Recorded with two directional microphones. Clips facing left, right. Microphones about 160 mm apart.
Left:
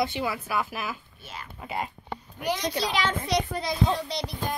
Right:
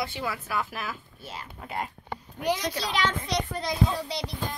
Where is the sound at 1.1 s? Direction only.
35° right (ahead or behind).